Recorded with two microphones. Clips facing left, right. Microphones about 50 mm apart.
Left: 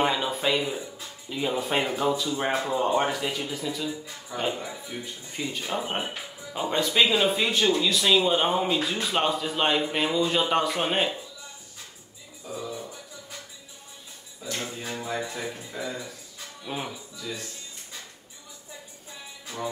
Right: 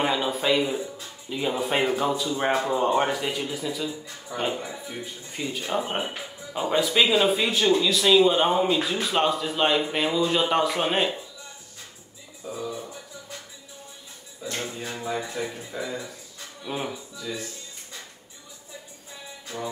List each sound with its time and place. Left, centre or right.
0.0 s speech: centre
12.4 s music: centre
14.4 s a sound: centre
14.8 s speech: centre